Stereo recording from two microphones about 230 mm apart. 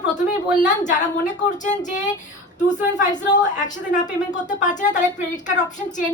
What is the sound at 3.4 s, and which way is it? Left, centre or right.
Speech, left.